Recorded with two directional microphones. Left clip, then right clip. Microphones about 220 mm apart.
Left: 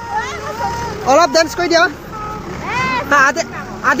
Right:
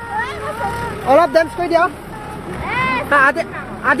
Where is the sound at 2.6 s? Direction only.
Centre (ahead or behind).